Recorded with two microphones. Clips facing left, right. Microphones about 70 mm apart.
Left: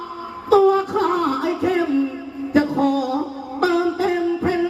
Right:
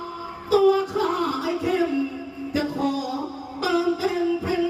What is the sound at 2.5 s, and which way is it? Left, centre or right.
Music, left.